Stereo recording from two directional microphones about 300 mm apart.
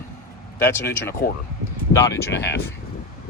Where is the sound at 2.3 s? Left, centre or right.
Left.